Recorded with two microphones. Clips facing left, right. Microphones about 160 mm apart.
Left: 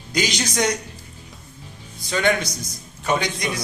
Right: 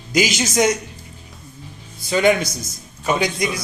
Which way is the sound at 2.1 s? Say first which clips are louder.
Right 5 dB; 10° right (ahead or behind).